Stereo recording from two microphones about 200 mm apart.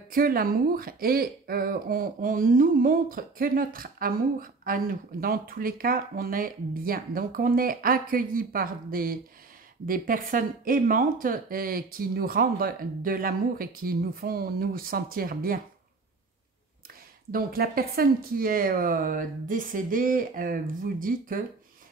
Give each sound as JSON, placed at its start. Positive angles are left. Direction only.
{"t": 0.1, "sound": "speech", "side_deg": -45}
{"t": 17.3, "sound": "speech", "side_deg": -50}